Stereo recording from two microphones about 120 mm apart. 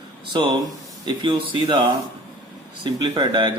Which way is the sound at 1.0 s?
40° right (ahead or behind).